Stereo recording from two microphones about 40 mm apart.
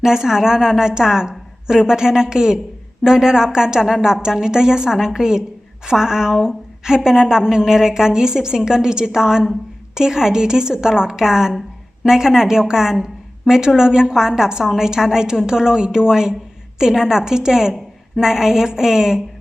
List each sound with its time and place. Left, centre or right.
0.0 s a woman's voice: centre